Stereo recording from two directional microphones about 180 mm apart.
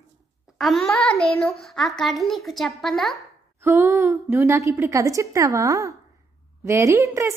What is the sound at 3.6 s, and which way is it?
A woman's voice, 10° right (ahead or behind).